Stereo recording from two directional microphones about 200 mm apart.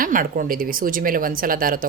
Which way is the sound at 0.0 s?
45° right (ahead or behind).